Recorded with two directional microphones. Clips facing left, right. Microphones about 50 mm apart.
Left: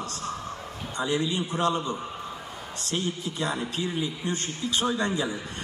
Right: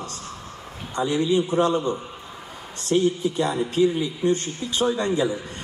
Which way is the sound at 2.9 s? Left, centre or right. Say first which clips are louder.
Right 10 dB; right.